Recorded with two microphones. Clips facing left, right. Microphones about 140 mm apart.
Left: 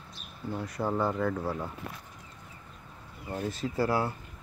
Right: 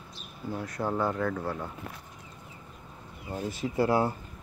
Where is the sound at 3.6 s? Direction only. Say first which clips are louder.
Right 4 dB; 20° right (ahead or behind).